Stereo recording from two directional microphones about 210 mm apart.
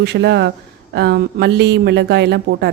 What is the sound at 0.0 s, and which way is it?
A man's voice, 55° right (ahead or behind).